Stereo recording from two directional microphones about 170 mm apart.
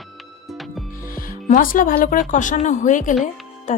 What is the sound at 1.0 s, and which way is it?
Speech, 55° left (ahead or behind).